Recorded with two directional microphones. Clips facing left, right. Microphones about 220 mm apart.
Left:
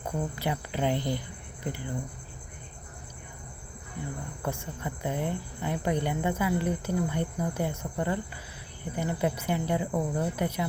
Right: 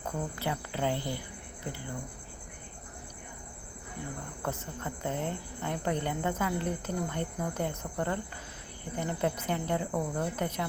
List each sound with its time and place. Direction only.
0.0 s a woman's voice: 15° left (ahead or behind)
4.4 s a woman's voice: 10° left (ahead or behind)